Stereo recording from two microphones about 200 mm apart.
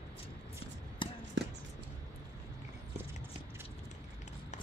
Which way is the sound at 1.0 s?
25° left (ahead or behind).